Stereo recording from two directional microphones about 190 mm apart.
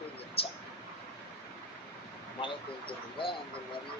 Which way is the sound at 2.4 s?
25° left (ahead or behind).